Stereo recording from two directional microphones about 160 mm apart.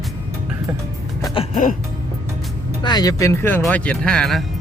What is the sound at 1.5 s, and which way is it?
Music, 55° left (ahead or behind).